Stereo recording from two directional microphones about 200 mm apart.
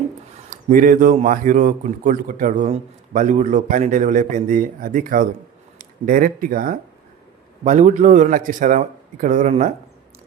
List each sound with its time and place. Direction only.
0.5 s a man's voice: 45° right (ahead or behind)